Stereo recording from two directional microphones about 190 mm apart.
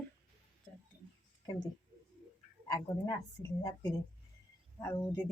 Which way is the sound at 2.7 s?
15° left (ahead or behind).